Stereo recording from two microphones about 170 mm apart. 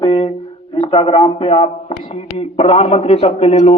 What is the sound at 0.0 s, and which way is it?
A man's voice, 30° left (ahead or behind).